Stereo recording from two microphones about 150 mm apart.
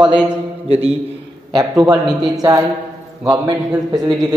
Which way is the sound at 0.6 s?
40° right (ahead or behind).